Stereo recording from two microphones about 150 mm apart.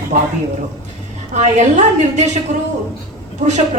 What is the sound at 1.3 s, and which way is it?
Speech, 50° right (ahead or behind).